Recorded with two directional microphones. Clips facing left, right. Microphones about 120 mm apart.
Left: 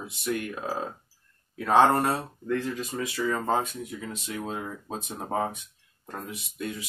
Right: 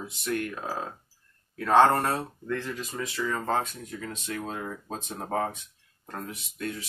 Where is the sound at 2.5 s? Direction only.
15° left (ahead or behind).